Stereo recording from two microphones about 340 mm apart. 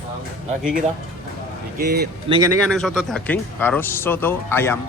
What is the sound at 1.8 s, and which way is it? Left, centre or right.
Speech, right.